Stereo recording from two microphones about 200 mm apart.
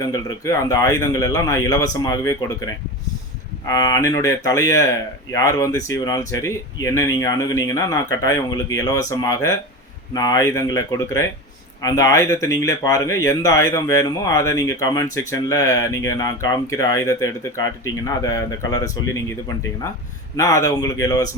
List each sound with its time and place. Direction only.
0.0 s speech: 20° left (ahead or behind)
3.7 s speech: 15° left (ahead or behind)
20.3 s speech: 15° left (ahead or behind)